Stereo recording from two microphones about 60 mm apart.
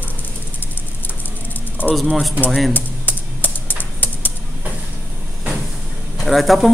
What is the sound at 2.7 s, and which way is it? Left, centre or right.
Computer keyboard, left.